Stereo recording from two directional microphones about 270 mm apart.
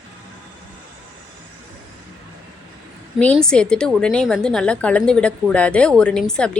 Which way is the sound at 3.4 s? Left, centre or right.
Centre.